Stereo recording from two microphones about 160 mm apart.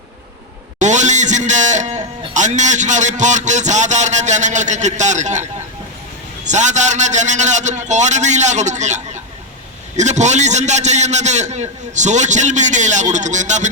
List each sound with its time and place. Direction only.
0.8 s a man's voice: 50° right (ahead or behind)
10.0 s a man's voice: 45° right (ahead or behind)